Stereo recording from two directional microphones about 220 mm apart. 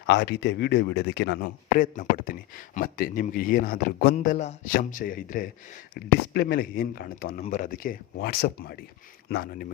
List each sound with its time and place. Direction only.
0.0 s speech: 50° left (ahead or behind)